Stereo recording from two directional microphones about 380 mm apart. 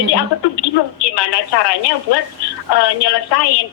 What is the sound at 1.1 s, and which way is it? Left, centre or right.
Speech, left.